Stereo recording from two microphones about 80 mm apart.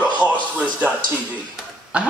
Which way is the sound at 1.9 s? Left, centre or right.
Centre.